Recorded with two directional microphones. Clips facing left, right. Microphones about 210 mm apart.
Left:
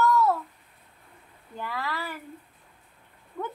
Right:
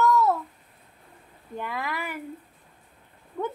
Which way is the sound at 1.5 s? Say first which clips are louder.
Right 2 dB; 20° right (ahead or behind).